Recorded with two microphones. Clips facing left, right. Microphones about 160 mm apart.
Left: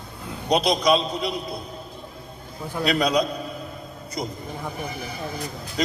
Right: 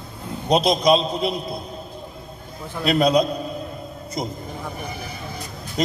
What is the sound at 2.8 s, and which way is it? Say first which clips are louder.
Speech: right 4 dB; 25° right (ahead or behind).